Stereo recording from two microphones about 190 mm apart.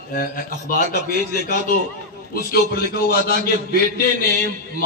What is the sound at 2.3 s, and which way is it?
A man's voice, 55° left (ahead or behind).